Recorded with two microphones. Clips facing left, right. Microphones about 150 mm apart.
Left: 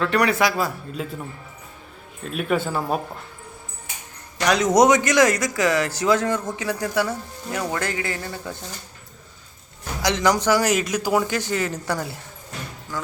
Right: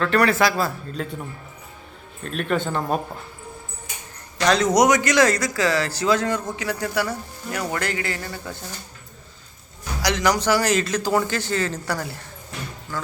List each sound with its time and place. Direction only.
0.0 s speech: 15° left (ahead or behind)
2.2 s speech: 5° left (ahead or behind)
4.4 s speech: 15° left (ahead or behind)
10.0 s speech: 20° left (ahead or behind)
12.9 s music: 15° left (ahead or behind)